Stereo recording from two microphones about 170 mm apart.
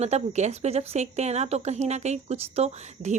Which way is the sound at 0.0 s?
40° right (ahead or behind).